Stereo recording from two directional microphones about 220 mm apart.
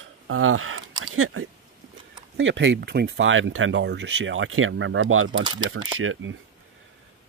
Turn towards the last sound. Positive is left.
turn(degrees=-65)  # may be behind; listen again after turning